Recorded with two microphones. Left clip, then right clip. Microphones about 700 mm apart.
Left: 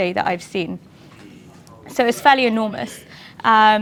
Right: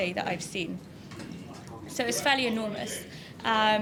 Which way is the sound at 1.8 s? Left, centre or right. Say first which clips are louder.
Left 13 dB; left.